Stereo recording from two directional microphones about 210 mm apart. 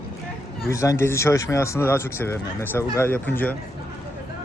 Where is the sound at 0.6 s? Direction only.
15° left (ahead or behind).